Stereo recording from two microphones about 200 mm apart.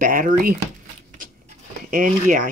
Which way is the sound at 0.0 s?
45° right (ahead or behind).